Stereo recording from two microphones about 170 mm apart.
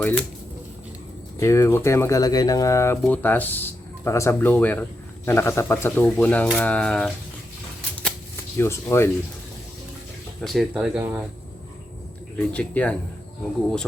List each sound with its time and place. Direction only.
0.0 s speech: 5° left (ahead or behind)
1.4 s speech: 15° left (ahead or behind)
8.5 s speech: 15° left (ahead or behind)
10.4 s speech: centre (ahead or behind)
12.4 s speech: 10° left (ahead or behind)